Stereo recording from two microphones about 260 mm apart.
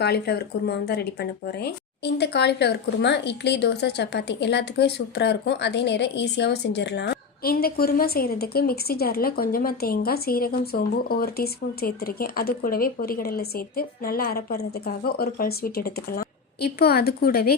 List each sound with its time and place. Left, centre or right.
0.0 s speech: left